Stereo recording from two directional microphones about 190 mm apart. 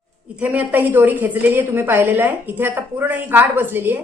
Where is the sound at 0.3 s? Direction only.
10° right (ahead or behind).